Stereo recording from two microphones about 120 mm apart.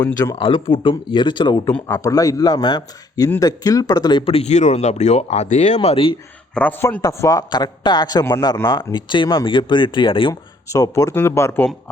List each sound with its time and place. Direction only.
0.3 s speech: 45° left (ahead or behind)
2.0 s a man's voice: 30° left (ahead or behind)
4.3 s speech: 65° left (ahead or behind)
6.5 s a man's voice: 15° left (ahead or behind)
7.0 s a man's voice: 25° left (ahead or behind)
8.2 s speech: 25° left (ahead or behind)
8.9 s speech: 40° left (ahead or behind)
10.7 s speech: 25° left (ahead or behind)